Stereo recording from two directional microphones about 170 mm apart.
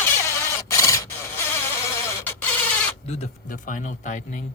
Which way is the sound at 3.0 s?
40° left (ahead or behind).